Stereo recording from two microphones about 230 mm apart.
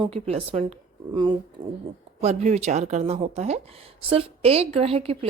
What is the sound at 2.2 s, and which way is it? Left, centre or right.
Speech, right.